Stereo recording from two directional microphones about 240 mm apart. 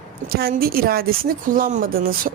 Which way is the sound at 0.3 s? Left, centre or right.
Right.